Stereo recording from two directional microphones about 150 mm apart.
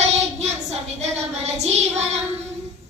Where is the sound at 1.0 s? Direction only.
45° right (ahead or behind).